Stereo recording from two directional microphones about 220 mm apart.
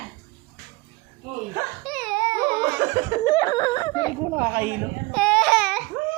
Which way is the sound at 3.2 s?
15° left (ahead or behind).